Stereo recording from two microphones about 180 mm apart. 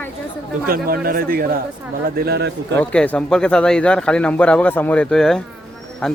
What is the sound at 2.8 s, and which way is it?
Speech, 5° left (ahead or behind).